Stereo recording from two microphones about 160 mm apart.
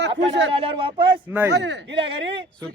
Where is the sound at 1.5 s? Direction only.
90° right.